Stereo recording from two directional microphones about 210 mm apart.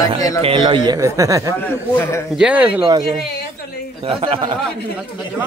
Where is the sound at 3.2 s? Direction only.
50° left (ahead or behind).